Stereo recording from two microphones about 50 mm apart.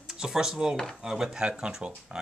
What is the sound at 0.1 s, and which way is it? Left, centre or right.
Speech, centre.